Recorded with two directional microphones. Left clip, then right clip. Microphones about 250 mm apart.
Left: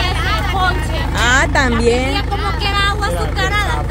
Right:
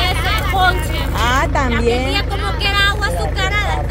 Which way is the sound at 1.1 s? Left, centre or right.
Centre.